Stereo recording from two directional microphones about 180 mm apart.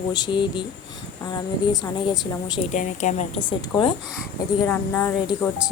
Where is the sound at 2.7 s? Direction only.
40° left (ahead or behind).